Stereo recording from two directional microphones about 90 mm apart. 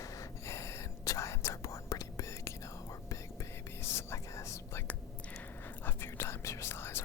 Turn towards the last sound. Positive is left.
turn(degrees=25)  # may be behind; listen again after turning